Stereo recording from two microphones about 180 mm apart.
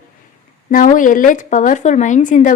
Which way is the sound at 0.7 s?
50° left (ahead or behind).